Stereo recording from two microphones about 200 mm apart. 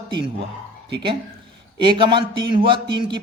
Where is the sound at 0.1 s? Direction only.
25° right (ahead or behind).